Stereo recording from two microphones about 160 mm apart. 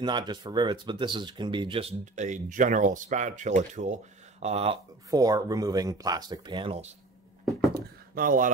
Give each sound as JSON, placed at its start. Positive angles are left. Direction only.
{"t": 0.0, "sound": "speech", "side_deg": -30}
{"t": 5.1, "sound": "speech", "side_deg": -20}
{"t": 7.7, "sound": "a sound", "side_deg": -65}